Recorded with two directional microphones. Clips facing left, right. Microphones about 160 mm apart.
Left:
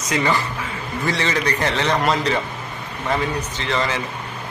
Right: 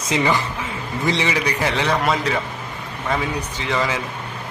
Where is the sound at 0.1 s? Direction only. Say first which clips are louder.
Right 1 dB; 20° right (ahead or behind).